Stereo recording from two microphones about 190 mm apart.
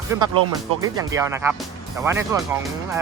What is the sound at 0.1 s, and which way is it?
Speech, 20° right (ahead or behind).